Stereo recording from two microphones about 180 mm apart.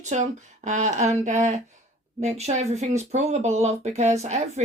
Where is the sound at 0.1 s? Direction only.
40° right (ahead or behind).